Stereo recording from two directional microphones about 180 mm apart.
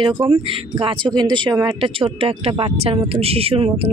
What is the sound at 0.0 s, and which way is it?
Speech, 30° right (ahead or behind).